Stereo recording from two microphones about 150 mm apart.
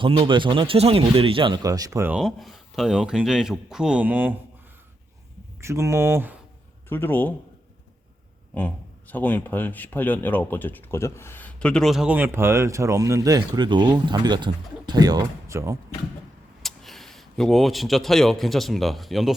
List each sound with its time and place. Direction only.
0.0 s speech: 35° right (ahead or behind)
2.0 s speech: 5° right (ahead or behind)
5.5 s speech: 20° right (ahead or behind)
6.8 s a man's voice: 15° left (ahead or behind)
8.5 s speech: 10° left (ahead or behind); by 15.8 s 20° right (ahead or behind)
16.6 s speech: centre (ahead or behind)